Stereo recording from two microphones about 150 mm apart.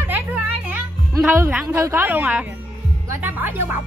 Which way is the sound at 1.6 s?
15° right (ahead or behind).